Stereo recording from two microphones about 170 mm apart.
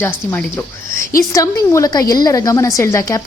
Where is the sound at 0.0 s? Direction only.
10° left (ahead or behind).